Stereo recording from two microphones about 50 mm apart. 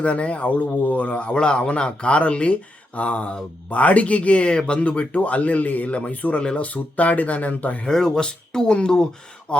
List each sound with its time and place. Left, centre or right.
0.0 s speech: left
7.9 s speech: centre